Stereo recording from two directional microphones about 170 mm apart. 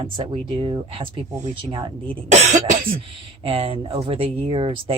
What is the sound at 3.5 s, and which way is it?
Speech, 35° right (ahead or behind).